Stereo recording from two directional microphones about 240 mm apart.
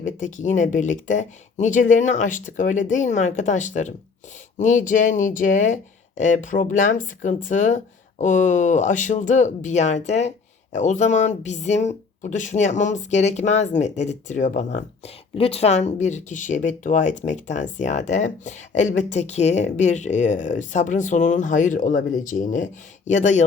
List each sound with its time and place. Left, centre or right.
0.0 s speech: left